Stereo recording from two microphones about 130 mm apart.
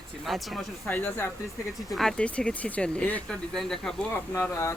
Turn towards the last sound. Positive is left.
turn(degrees=20)  # may be behind; listen again after turning